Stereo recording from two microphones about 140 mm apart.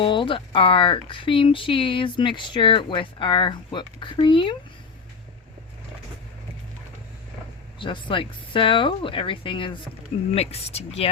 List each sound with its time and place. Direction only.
0.0 s speech: 35° left (ahead or behind)
7.8 s speech: 35° left (ahead or behind)
10.3 s speech: 50° left (ahead or behind)